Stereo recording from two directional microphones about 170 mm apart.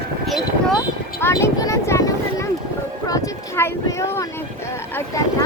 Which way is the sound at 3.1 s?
20° left (ahead or behind).